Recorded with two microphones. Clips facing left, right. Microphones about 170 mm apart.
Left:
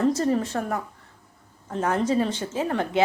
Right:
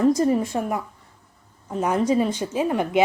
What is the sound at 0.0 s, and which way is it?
A woman's voice, 10° right (ahead or behind).